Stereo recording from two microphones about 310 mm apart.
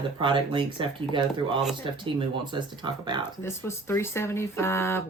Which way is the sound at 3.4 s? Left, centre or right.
Centre.